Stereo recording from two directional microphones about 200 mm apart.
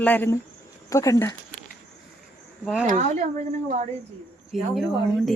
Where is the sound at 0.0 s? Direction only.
10° left (ahead or behind).